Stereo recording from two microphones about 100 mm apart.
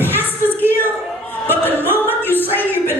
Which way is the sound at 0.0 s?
20° left (ahead or behind).